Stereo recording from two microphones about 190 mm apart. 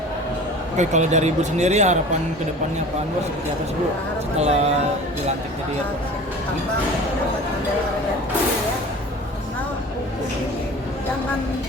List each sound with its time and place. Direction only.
0.8 s speech: 40° right (ahead or behind)
4.4 s speech: 35° right (ahead or behind)